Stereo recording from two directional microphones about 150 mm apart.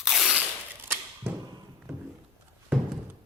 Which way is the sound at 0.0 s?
Centre (ahead or behind).